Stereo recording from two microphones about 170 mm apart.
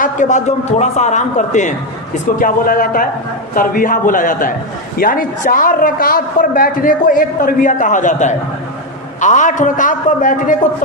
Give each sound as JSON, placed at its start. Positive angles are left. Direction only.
{"t": 0.0, "sound": "a man's voice", "side_deg": 45}